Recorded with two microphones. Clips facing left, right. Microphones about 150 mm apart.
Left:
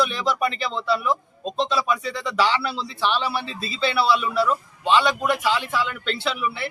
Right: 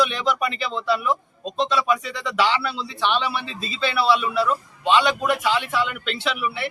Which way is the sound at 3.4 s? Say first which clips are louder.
Left 1 dB; 35° left (ahead or behind).